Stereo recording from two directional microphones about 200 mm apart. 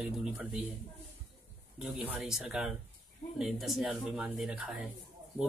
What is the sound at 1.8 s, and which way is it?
Speech, 5° right (ahead or behind).